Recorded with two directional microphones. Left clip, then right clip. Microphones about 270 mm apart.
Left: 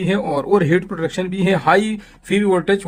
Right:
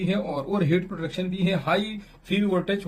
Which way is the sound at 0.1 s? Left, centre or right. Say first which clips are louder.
Left 12 dB; left.